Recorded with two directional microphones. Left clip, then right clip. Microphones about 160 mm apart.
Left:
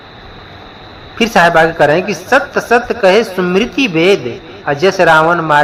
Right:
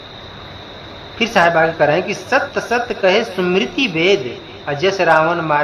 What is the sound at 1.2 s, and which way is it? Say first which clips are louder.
A woman's voice: left 5 dB; 25° left (ahead or behind).